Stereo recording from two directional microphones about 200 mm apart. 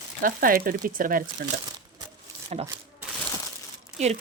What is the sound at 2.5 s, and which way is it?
Speech, 30° right (ahead or behind).